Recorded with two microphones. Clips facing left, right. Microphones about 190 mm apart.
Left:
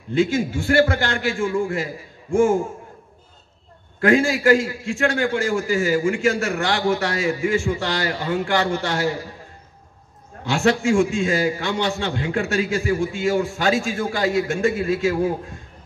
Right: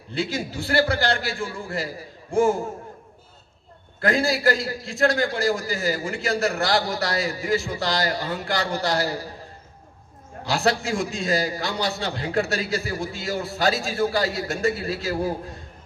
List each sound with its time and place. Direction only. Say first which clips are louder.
0.1 s a man's voice: left 8 dB; 40° right (ahead or behind)
4.0 s a man's voice: left 4 dB; 35° right (ahead or behind)
10.4 s a man's voice: left 4 dB; 35° right (ahead or behind)